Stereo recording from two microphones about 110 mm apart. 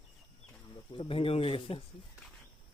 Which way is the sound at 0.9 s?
55° left (ahead or behind).